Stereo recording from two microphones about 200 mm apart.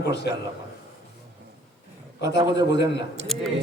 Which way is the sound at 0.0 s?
60° left (ahead or behind).